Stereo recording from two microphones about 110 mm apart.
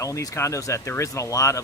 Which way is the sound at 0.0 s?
30° left (ahead or behind).